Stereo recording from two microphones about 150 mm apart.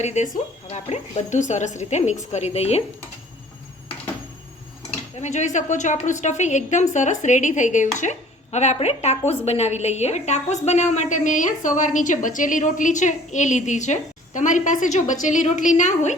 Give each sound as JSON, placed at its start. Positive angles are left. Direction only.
{"t": 0.0, "sound": "a woman's voice", "side_deg": 50}
{"t": 4.9, "sound": "a woman's voice", "side_deg": 50}